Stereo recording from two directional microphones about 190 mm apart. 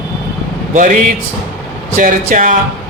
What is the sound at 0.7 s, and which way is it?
A man's voice, 40° right (ahead or behind).